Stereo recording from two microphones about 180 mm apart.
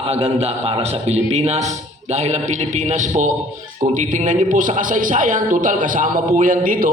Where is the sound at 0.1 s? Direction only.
35° right (ahead or behind).